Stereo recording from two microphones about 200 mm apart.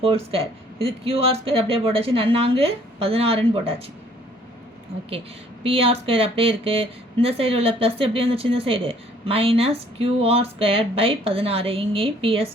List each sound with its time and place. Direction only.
0.0 s a woman's voice: 30° right (ahead or behind)
5.6 s a woman's voice: 30° right (ahead or behind)